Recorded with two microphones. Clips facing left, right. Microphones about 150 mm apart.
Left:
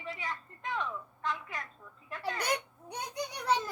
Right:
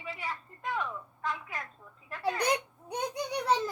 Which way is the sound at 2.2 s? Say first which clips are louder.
Right 4 dB; 20° right (ahead or behind).